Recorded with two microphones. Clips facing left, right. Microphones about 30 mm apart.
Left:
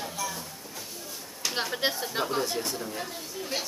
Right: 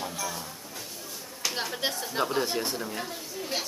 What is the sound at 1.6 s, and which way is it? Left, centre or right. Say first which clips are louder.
Speech: left 2 dB; centre.